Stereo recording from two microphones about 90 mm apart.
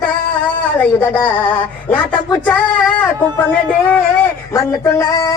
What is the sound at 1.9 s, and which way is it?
Speech, 15° left (ahead or behind).